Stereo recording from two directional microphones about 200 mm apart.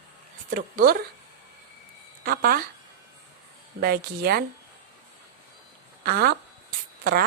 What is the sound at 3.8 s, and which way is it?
Speech, 50° right (ahead or behind).